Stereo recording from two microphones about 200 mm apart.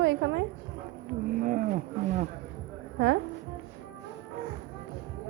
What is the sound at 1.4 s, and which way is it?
Speech, 40° right (ahead or behind).